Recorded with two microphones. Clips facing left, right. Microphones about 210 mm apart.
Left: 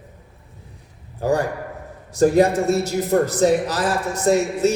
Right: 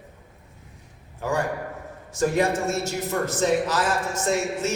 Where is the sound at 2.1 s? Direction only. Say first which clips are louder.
Left 7 dB; 35° left (ahead or behind).